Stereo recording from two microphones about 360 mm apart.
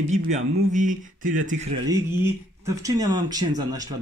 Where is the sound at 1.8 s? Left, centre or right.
Centre.